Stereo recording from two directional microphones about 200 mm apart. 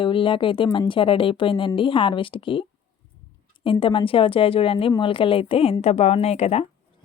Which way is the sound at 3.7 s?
25° left (ahead or behind).